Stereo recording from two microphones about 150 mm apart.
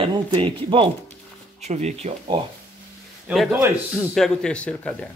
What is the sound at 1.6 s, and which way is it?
Speech, 50° right (ahead or behind).